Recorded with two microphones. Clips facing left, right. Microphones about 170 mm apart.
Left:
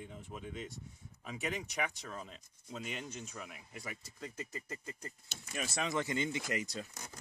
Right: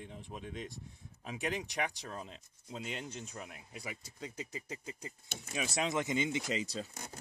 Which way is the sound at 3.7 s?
15° right (ahead or behind).